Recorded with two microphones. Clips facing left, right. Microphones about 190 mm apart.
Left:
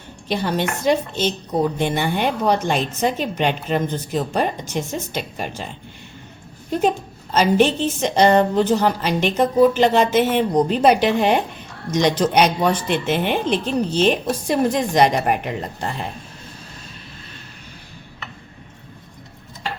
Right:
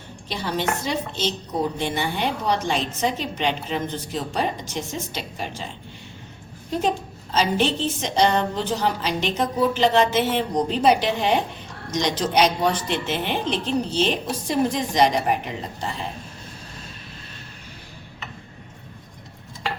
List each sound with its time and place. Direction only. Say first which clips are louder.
0.3 s a woman's voice: left 4 dB; 55° left (ahead or behind)
7.3 s a woman's voice: left 5 dB; 50° left (ahead or behind)